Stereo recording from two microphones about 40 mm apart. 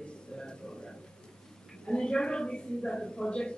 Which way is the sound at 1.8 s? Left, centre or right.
Left.